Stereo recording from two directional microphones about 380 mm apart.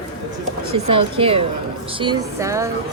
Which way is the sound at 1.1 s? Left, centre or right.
Centre.